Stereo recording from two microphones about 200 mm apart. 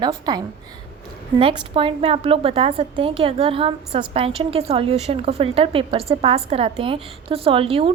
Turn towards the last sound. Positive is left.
turn(degrees=-30)  # may be behind; listen again after turning